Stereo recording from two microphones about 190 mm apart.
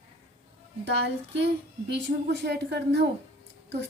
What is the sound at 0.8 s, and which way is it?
A woman's voice, 65° right (ahead or behind).